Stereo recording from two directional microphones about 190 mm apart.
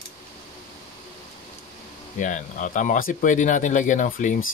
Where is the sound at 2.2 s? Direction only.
40° left (ahead or behind).